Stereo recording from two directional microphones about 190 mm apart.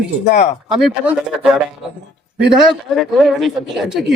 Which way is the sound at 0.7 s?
5° right (ahead or behind).